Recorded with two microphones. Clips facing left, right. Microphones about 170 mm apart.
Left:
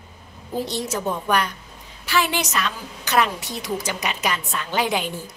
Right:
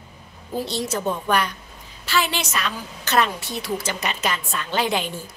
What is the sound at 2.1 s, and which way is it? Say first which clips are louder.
A woman's voice: left 1 dB; 15° left (ahead or behind).